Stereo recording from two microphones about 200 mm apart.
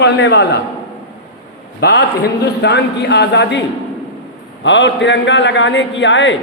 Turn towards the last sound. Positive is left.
turn(degrees=65)  # may be behind; listen again after turning